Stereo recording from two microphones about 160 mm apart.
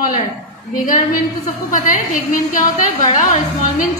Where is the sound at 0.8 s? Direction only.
55° left (ahead or behind).